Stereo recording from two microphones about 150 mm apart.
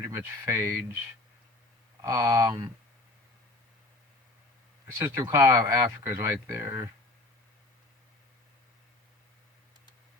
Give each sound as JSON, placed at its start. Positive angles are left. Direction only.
{"t": 0.0, "sound": "speech", "side_deg": -20}
{"t": 2.0, "sound": "speech", "side_deg": -20}
{"t": 4.9, "sound": "speech", "side_deg": -15}